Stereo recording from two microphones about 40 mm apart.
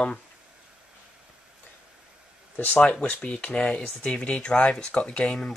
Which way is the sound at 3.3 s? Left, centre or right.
Left.